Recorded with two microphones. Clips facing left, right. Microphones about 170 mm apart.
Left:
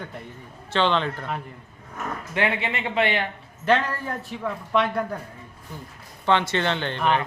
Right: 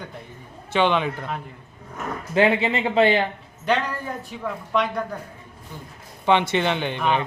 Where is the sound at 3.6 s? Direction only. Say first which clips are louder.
Left 1 dB; centre (ahead or behind).